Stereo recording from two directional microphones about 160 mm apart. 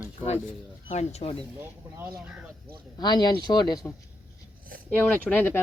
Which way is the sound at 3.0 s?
25° left (ahead or behind).